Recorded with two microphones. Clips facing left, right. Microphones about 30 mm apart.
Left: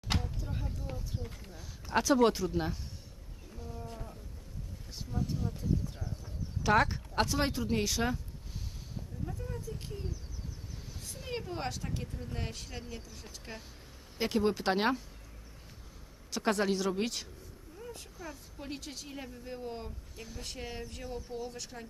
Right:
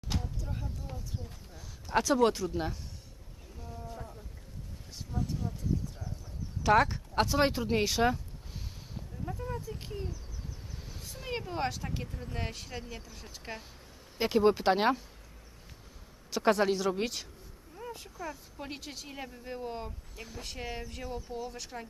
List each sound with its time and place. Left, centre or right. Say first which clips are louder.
0.1 s a sound: left 2 dB; left
0.4 s speech: left 1 dB; centre
3.6 s insect: left 1 dB; centre
5.3 s speech: even; centre
6.6 s speech: right 2 dB; centre
7.4 s speech: right 3 dB; centre
16.3 s speech: right 4 dB; centre
17.7 s a sound: right 4 dB; centre
18.5 s speech: right 1 dB; centre